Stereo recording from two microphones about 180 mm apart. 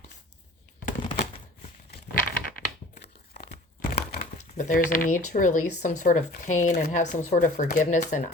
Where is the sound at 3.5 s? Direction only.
60° left (ahead or behind).